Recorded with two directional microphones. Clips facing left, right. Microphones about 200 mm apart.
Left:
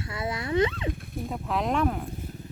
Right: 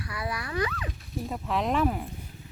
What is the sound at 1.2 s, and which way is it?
Speech, centre (ahead or behind).